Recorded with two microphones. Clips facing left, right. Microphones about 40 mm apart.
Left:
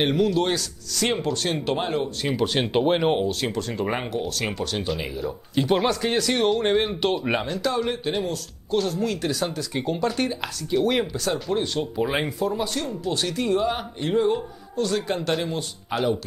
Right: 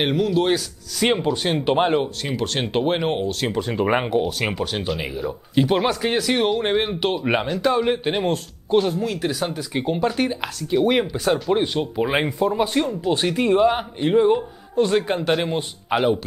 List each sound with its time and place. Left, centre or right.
0.0 s speech: centre; by 2.0 s right
2.2 s speech: centre
3.4 s speech: centre
9.0 s speech: centre
12.5 s speech: right